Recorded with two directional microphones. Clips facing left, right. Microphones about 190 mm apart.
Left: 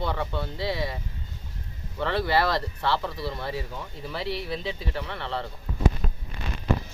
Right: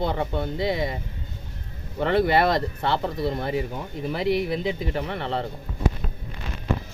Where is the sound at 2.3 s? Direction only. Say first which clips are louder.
Right 4 dB; 20° right (ahead or behind).